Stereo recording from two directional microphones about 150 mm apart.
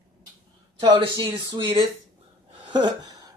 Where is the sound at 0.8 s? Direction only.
30° right (ahead or behind).